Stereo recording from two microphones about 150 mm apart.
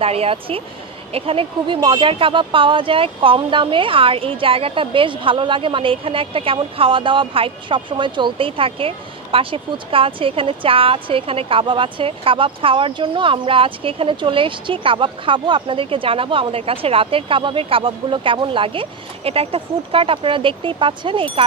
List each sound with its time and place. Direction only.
0.0 s speech: 40° right (ahead or behind)